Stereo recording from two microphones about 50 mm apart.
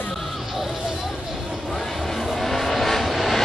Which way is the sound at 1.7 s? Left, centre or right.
Centre.